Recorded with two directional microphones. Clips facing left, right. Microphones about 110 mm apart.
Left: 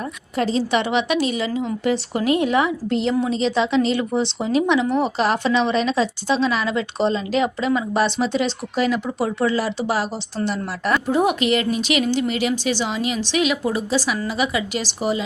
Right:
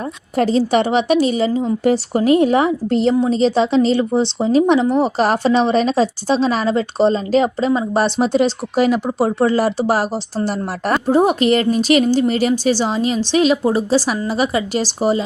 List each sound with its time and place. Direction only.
0.3 s speech: 40° right (ahead or behind)